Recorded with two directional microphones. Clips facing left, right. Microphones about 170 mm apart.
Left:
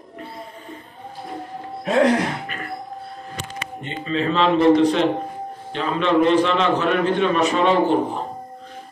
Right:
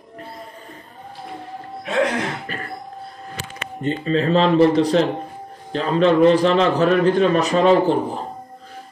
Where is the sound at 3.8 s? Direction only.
40° right (ahead or behind).